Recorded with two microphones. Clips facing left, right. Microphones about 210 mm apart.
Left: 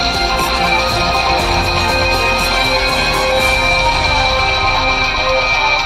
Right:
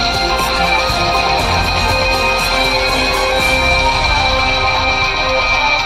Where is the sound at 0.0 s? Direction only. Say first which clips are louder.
Even; centre (ahead or behind).